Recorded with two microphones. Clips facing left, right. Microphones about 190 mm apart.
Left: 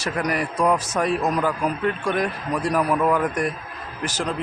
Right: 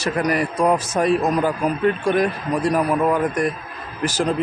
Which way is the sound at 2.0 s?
30° right (ahead or behind).